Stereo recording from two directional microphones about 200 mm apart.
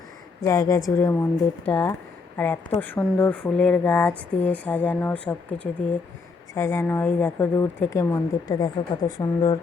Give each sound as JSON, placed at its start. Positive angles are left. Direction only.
{"t": 0.4, "sound": "speech", "side_deg": 15}